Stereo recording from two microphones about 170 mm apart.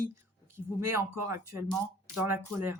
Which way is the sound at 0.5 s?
15° right (ahead or behind).